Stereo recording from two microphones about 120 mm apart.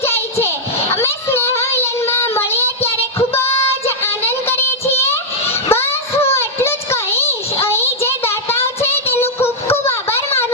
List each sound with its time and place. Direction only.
0.9 s child singing: 20° left (ahead or behind)
5.6 s a sound: 20° left (ahead or behind)
6.3 s child singing: 20° left (ahead or behind)